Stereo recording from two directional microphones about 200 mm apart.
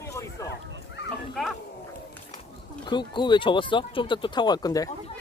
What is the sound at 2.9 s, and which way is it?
Speech, 25° left (ahead or behind).